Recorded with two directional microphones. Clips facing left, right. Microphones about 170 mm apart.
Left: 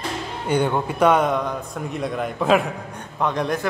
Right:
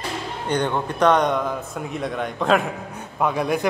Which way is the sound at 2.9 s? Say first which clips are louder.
Right 1 dB; 5° right (ahead or behind).